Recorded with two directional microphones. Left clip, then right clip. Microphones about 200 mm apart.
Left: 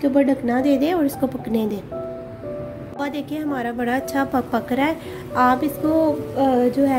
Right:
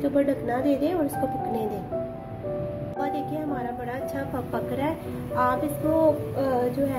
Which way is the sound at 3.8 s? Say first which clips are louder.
Left 8 dB; 55° left (ahead or behind).